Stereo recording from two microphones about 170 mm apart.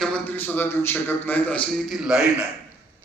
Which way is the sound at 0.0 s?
10° left (ahead or behind).